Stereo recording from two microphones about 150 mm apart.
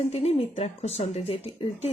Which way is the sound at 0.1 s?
45° left (ahead or behind).